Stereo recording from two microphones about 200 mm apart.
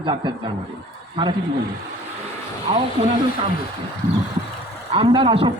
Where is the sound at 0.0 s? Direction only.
20° right (ahead or behind).